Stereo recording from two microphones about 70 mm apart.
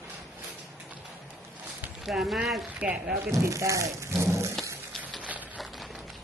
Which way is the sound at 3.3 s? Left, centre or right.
Right.